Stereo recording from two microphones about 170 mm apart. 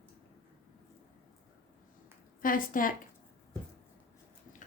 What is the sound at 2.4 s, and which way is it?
Speech, 55° left (ahead or behind).